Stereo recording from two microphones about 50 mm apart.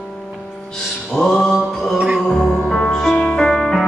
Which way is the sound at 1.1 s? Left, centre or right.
Centre.